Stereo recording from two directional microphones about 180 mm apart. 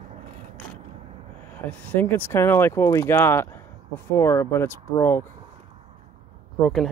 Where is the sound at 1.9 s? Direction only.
10° left (ahead or behind).